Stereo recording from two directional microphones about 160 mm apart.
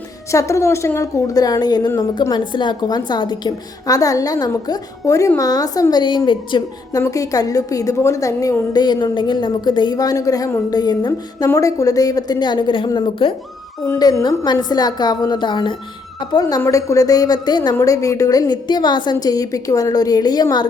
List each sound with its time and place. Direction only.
0.3 s speech: 20° left (ahead or behind)